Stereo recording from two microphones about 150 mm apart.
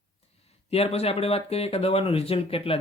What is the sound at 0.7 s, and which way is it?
Speech, 40° left (ahead or behind).